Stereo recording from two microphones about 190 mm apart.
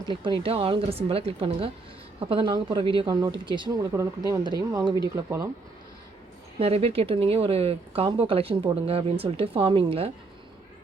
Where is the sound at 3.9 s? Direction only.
15° right (ahead or behind).